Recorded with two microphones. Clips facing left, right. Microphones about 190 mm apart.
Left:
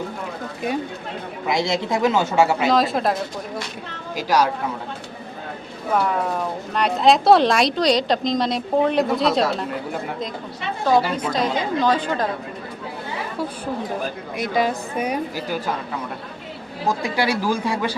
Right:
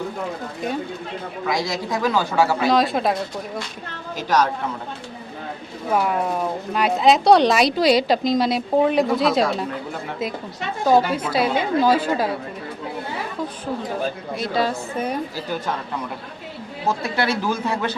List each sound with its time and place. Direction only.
1.5 s speech: 25° left (ahead or behind)
2.6 s speech: centre (ahead or behind)
4.2 s a woman's voice: 10° left (ahead or behind)
5.9 s speech: 5° right (ahead or behind)
11.1 s a woman's voice: 10° right (ahead or behind)
14.3 s a woman's voice: 15° left (ahead or behind)
16.8 s a woman's voice: 15° left (ahead or behind)